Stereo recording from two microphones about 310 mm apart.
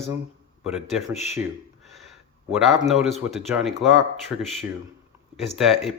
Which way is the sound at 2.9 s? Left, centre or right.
Centre.